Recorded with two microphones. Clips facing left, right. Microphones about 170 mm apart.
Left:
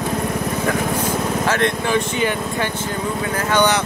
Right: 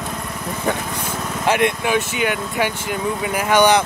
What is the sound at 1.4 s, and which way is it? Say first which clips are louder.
Speech: right 5 dB; 10° right (ahead or behind).